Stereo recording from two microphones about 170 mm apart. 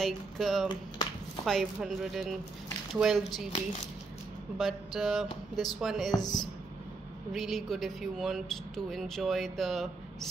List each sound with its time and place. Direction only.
0.0 s speech: centre (ahead or behind)
4.6 s speech: centre (ahead or behind)
6.1 s a woman's voice: 25° left (ahead or behind)
7.3 s speech: centre (ahead or behind)